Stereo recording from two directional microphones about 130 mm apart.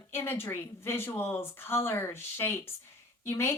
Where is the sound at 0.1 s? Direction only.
15° left (ahead or behind).